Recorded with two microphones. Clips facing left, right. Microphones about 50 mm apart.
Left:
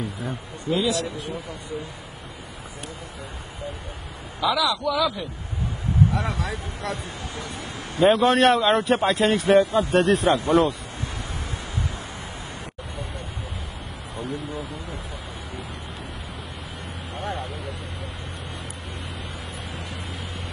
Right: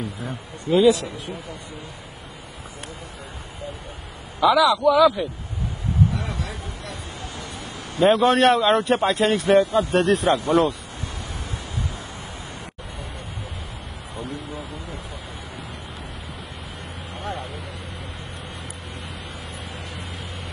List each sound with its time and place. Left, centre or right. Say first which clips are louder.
0.7 s a man's voice: right 8 dB; right
4.4 s a man's voice: right 6 dB; centre
6.1 s speech: left 3 dB; left
8.0 s a man's voice: right 1 dB; centre
14.1 s a sound: left 2 dB; centre
17.2 s vehicle: left 1 dB; centre